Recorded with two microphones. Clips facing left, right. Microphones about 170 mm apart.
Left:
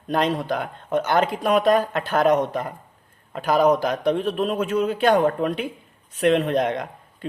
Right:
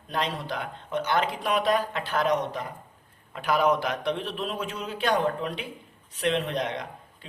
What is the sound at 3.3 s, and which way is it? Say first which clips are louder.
A man's voice: left 5 dB; 40° left (ahead or behind).